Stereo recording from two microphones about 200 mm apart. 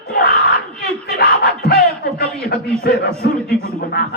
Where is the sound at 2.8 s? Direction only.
50° left (ahead or behind).